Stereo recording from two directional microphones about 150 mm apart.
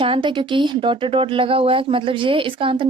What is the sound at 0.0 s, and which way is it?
Speech, 35° right (ahead or behind).